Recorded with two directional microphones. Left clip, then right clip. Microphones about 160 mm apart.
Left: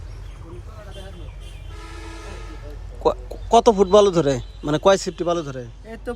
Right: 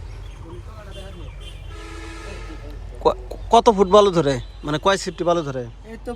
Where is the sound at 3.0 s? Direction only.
15° left (ahead or behind).